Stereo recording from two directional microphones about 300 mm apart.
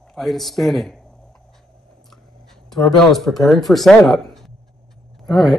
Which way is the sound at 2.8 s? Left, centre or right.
Centre.